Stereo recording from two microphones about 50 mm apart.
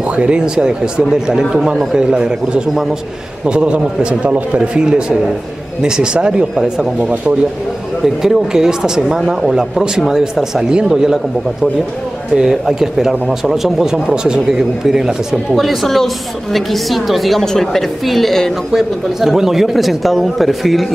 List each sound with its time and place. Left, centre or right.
0.1 s a man's voice: right
8.0 s a man's voice: centre
12.4 s a man's voice: centre